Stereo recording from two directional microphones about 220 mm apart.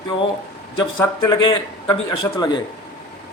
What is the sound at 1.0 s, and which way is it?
A man's voice, 20° left (ahead or behind).